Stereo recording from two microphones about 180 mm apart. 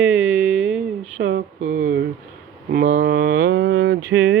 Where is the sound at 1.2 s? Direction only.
60° right (ahead or behind).